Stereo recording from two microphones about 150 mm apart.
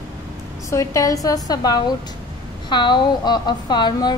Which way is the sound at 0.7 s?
20° left (ahead or behind).